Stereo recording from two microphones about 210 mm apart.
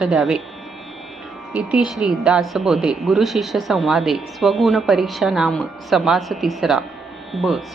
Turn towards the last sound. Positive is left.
turn(degrees=0)  # may be behind; listen again after turning